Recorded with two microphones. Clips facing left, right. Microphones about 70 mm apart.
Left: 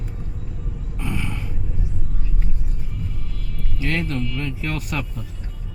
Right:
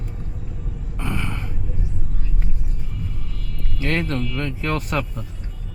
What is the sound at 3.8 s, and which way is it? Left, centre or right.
Music, right.